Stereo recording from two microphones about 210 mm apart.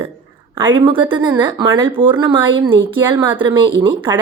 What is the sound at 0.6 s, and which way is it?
Speech, 20° right (ahead or behind).